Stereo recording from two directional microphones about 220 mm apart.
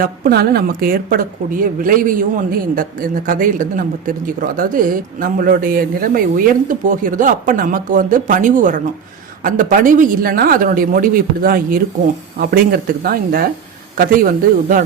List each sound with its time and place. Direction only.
0.0 s a woman's voice: 45° right (ahead or behind)